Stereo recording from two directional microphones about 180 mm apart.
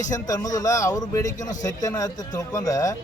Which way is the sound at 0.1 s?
20° left (ahead or behind).